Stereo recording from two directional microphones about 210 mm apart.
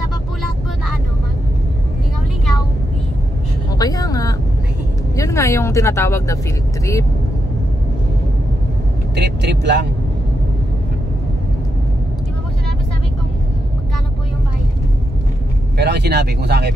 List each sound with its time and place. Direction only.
3.7 s a sound: 15° left (ahead or behind)
5.1 s speech: 15° left (ahead or behind)
9.1 s speech: 55° right (ahead or behind)
15.8 s speech: 50° right (ahead or behind)